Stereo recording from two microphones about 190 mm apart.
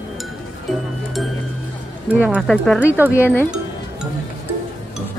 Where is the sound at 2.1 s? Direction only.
10° right (ahead or behind); by 3.5 s 10° left (ahead or behind).